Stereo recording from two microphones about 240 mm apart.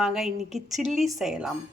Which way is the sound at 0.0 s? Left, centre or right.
Centre.